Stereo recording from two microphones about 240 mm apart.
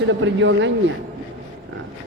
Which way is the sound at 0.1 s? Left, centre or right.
Right.